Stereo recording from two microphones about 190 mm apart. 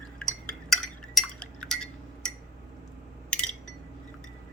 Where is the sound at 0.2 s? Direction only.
5° left (ahead or behind).